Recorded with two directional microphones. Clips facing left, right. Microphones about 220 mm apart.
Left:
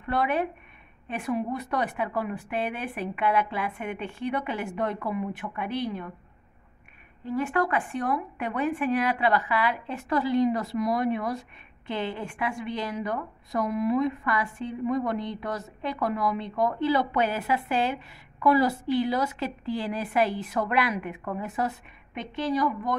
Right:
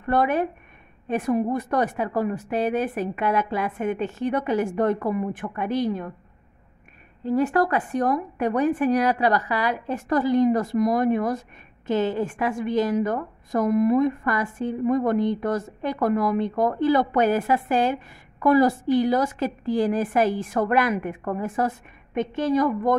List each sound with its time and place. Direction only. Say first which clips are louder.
0.0 s a woman's voice: right 5 dB; 45° right (ahead or behind)
7.2 s a woman's voice: right 6 dB; 40° right (ahead or behind)